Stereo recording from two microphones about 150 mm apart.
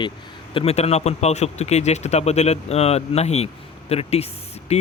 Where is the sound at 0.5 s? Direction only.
45° left (ahead or behind).